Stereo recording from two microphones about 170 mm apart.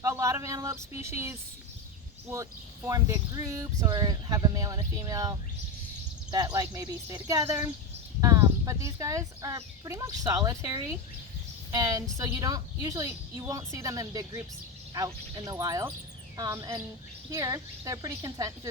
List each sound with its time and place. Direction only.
0.0 s speech: 15° right (ahead or behind)